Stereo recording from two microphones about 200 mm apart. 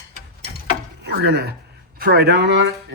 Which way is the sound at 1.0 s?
55° right (ahead or behind).